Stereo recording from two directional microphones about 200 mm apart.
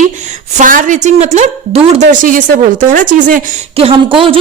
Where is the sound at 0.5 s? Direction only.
40° right (ahead or behind).